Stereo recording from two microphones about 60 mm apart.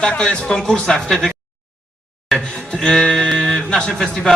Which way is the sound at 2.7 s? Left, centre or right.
Centre.